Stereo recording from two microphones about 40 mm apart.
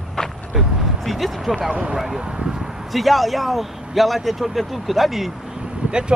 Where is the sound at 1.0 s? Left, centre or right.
Centre.